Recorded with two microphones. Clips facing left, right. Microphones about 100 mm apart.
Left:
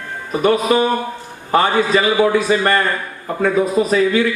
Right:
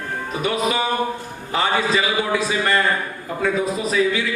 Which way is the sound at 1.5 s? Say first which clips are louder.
Left 5 dB; 50° left (ahead or behind).